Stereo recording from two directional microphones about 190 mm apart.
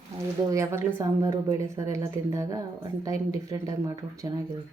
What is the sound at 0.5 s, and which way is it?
Speech, 15° right (ahead or behind).